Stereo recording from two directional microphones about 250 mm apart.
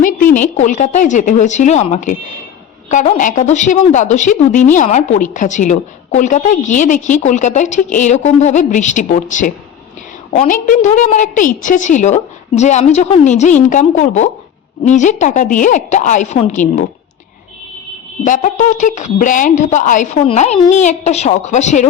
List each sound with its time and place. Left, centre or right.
0.0 s a woman's voice: left
18.3 s a woman's voice: left